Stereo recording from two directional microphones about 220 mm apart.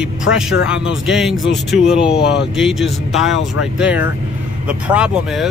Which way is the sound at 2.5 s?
Centre (ahead or behind).